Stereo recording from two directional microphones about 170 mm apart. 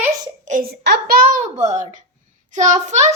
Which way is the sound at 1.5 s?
45° right (ahead or behind).